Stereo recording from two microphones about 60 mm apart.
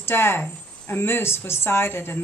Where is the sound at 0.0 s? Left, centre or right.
Left.